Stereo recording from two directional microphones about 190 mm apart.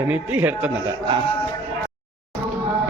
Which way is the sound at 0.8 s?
25° right (ahead or behind).